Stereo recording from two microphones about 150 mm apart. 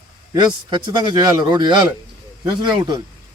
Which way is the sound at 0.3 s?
30° right (ahead or behind).